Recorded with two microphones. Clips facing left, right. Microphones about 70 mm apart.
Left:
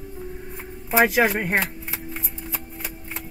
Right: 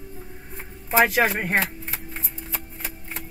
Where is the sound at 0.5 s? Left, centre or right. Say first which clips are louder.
Even; centre.